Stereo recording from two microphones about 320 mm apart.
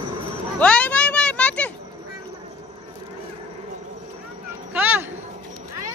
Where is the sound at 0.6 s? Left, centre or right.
Centre.